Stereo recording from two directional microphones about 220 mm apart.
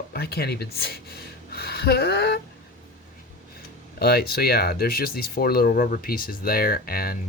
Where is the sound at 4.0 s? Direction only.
45° left (ahead or behind).